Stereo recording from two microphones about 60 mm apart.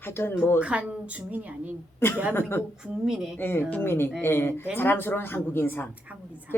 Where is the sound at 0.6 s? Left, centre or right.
Right.